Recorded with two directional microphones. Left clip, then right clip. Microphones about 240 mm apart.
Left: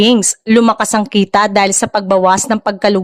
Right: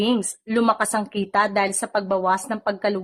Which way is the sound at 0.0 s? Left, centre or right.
Left.